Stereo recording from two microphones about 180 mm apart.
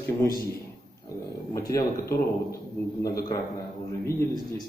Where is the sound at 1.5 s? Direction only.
15° left (ahead or behind).